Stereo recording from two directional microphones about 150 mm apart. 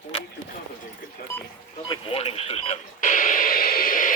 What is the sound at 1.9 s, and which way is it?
Radio, 40° left (ahead or behind).